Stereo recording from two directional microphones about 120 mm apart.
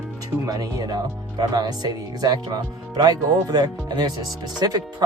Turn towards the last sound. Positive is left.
turn(degrees=-35)  # may be behind; listen again after turning